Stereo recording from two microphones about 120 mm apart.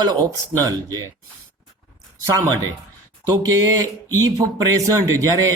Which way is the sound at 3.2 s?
30° right (ahead or behind).